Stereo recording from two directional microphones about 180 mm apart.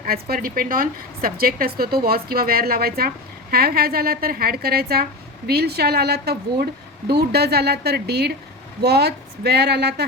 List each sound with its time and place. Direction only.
0.0 s speech: 55° right (ahead or behind)